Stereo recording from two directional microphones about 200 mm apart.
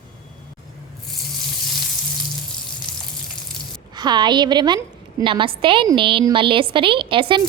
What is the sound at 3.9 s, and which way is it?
A woman's voice, 20° right (ahead or behind).